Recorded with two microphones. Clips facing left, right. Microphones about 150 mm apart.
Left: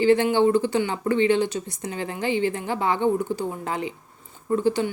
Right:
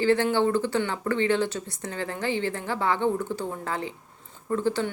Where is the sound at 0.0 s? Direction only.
15° left (ahead or behind).